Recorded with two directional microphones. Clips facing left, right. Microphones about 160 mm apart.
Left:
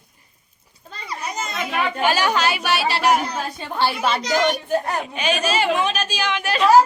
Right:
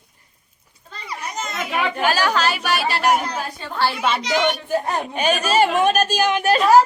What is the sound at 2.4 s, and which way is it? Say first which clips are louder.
Speech: even; 45° right (ahead or behind).